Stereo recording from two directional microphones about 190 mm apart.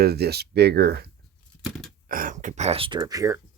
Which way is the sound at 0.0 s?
55° right (ahead or behind).